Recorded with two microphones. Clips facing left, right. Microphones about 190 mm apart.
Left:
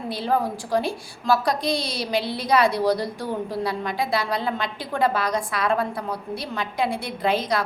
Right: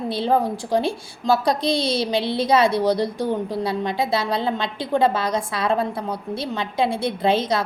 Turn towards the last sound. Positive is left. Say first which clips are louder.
# right 3 dB
turn(degrees=-25)  # may be behind; listen again after turning